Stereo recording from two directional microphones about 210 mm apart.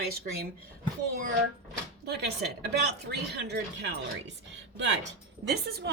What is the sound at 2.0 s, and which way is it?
A woman's voice, 50° right (ahead or behind).